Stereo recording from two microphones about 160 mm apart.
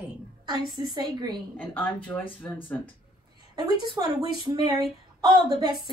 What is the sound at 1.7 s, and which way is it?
Speech, 10° left (ahead or behind).